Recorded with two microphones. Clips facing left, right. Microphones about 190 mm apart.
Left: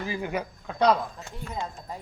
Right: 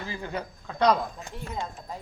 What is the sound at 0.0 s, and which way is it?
Speech, 15° left (ahead or behind).